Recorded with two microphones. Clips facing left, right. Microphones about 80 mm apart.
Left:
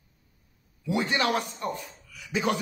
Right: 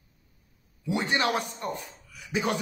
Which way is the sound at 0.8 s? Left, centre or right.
Right.